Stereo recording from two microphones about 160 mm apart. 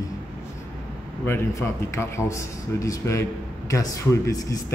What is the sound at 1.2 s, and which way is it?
A man's voice, 15° left (ahead or behind).